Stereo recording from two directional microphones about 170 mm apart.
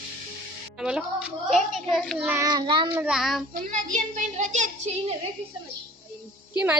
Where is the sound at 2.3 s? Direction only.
20° right (ahead or behind).